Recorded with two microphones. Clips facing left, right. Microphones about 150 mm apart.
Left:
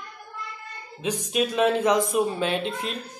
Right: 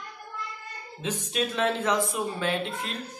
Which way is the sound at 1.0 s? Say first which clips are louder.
Left 4 dB; 15° left (ahead or behind).